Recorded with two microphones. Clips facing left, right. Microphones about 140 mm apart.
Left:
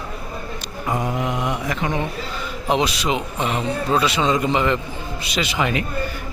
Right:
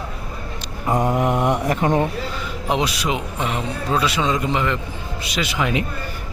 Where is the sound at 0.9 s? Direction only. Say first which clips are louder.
Right 4 dB; 35° right (ahead or behind).